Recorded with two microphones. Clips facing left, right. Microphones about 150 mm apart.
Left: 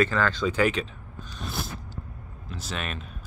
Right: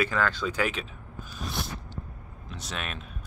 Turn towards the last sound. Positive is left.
turn(degrees=0)  # may be behind; listen again after turning